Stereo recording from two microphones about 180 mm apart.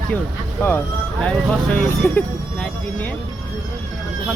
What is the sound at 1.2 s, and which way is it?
Speech, 5° left (ahead or behind).